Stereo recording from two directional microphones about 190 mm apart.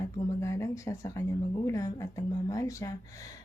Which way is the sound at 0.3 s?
15° left (ahead or behind).